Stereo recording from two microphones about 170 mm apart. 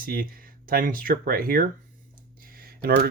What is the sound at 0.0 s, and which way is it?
Speech, 60° right (ahead or behind).